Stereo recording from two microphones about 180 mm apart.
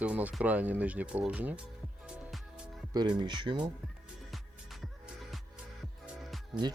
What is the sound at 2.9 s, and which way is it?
Speech, 25° right (ahead or behind).